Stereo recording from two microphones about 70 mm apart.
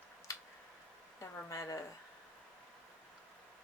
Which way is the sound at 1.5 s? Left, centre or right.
Left.